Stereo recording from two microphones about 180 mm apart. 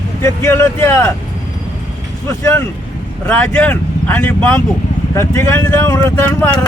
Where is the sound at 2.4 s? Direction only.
15° left (ahead or behind).